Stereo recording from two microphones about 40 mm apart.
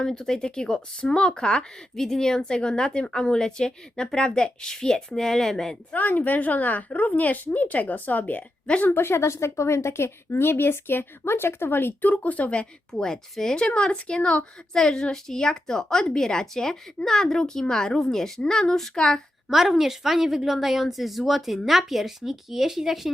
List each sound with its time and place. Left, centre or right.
0.0 s speech: centre
5.9 s a woman's voice: left
9.0 s speech: left
12.0 s speech: left
12.5 s speech: centre
13.8 s speech: left
14.7 s speech: centre
19.5 s a woman's voice: centre